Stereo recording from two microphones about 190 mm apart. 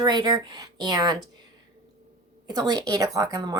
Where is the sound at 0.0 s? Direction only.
20° right (ahead or behind).